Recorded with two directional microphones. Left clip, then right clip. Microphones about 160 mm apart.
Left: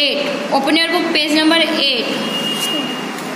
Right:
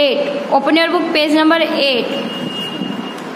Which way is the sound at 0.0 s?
25° right (ahead or behind).